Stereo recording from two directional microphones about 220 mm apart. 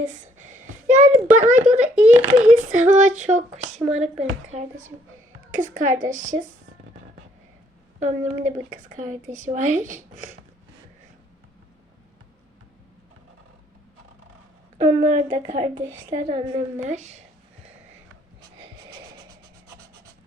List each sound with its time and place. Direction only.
0.0 s a sound: 35° right (ahead or behind)
1.3 s speech: 35° right (ahead or behind)
7.9 s speech: 35° right (ahead or behind)
14.8 s a woman's voice: 25° right (ahead or behind)
18.9 s music: 20° right (ahead or behind)